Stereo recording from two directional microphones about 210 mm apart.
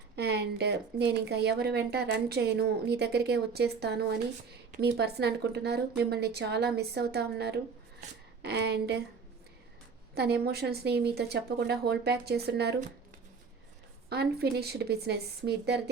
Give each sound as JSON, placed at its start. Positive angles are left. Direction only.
{"t": 0.2, "sound": "a woman's voice", "side_deg": -50}
{"t": 10.2, "sound": "a woman's voice", "side_deg": -50}
{"t": 14.1, "sound": "a woman's voice", "side_deg": -50}